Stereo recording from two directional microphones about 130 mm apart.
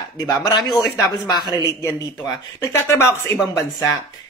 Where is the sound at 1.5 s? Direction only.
30° left (ahead or behind).